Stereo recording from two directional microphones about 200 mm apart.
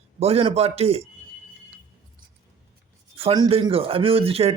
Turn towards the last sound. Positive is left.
turn(degrees=-30)  # may be behind; listen again after turning